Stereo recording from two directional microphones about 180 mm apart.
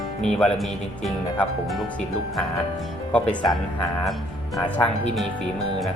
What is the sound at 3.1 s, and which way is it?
Speech, 5° left (ahead or behind).